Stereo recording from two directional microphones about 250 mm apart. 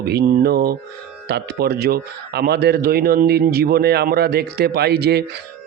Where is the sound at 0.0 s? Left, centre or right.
Right.